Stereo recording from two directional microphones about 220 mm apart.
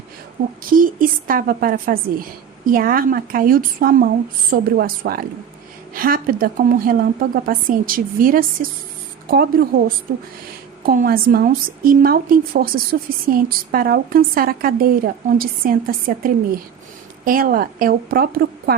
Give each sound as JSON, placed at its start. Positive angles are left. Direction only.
{"t": 0.7, "sound": "speech", "side_deg": -40}
{"t": 10.8, "sound": "speech", "side_deg": -40}